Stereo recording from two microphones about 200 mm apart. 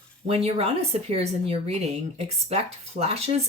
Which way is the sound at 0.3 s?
30° right (ahead or behind).